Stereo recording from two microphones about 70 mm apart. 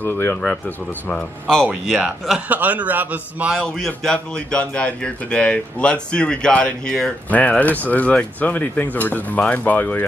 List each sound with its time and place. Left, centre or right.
0.0 s speech: left
0.5 s speech: left
1.5 s speech: centre
2.4 s a man's voice: right
3.5 s a man's voice: centre
7.2 s speech: left